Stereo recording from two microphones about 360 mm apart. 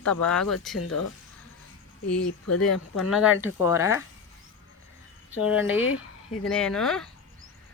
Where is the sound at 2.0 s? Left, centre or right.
Left.